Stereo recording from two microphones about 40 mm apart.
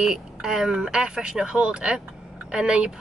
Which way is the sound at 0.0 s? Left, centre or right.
Centre.